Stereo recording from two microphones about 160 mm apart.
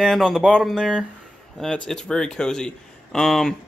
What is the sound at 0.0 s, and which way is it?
A man's voice, centre (ahead or behind).